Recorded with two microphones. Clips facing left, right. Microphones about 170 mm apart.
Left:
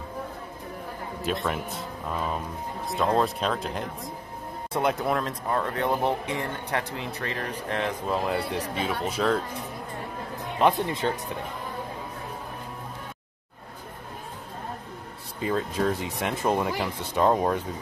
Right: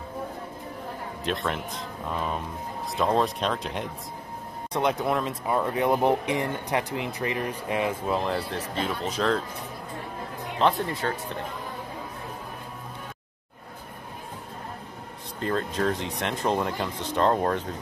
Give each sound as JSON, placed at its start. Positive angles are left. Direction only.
{"t": 1.2, "sound": "speech", "side_deg": 5}
{"t": 2.9, "sound": "speech", "side_deg": 0}
{"t": 8.1, "sound": "speech", "side_deg": 5}
{"t": 10.6, "sound": "speech", "side_deg": 20}
{"t": 15.4, "sound": "speech", "side_deg": 5}